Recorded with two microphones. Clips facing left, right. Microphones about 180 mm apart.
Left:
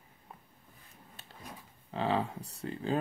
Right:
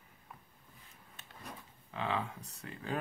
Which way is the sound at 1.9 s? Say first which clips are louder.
Left 5 dB; 35° left (ahead or behind).